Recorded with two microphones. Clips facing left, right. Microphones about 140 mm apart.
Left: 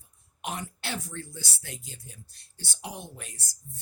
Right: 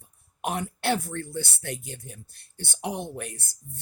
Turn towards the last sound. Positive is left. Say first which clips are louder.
# right 10 dB
turn(degrees=-60)  # may be behind; listen again after turning